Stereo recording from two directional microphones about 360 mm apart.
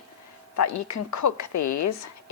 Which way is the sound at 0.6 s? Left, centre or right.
Left.